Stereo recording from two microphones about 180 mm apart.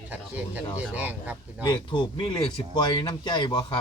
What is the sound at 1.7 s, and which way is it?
Speech, 25° left (ahead or behind).